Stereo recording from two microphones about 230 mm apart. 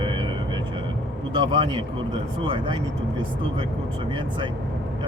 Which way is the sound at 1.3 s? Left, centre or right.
Centre.